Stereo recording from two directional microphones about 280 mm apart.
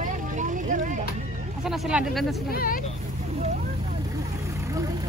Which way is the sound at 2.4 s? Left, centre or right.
Left.